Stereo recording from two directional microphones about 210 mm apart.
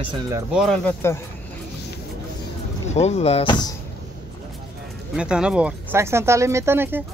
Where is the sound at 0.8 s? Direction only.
10° left (ahead or behind).